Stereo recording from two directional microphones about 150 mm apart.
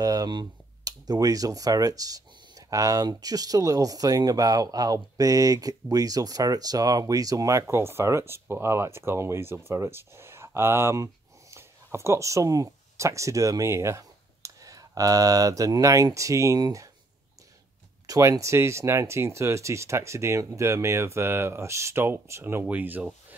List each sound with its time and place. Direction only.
0.0 s speech: 25° right (ahead or behind)
18.0 s speech: 25° right (ahead or behind)